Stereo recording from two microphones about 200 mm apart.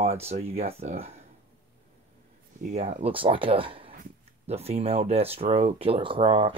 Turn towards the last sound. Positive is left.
turn(degrees=-30)  # may be behind; listen again after turning